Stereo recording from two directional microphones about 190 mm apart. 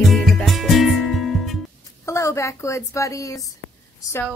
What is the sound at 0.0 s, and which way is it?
Music, centre (ahead or behind).